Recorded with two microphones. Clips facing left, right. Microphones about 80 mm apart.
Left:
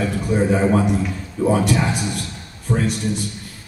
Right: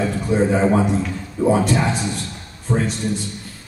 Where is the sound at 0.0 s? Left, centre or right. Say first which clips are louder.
Right 1 dB; right.